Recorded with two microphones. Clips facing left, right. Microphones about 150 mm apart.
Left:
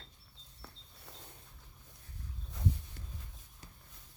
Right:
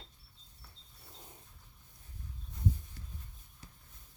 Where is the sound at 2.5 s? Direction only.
85° left.